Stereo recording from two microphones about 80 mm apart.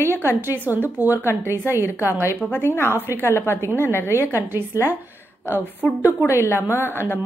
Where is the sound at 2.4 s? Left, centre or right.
Centre.